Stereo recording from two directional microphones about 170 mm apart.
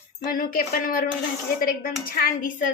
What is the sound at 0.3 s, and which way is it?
Speech, 60° left (ahead or behind).